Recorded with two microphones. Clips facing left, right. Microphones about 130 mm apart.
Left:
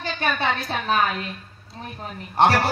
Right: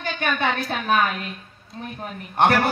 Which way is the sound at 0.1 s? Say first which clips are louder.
Even; 40° left (ahead or behind).